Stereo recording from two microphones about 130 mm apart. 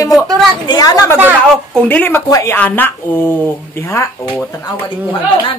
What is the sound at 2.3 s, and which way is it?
A woman's voice, 25° left (ahead or behind).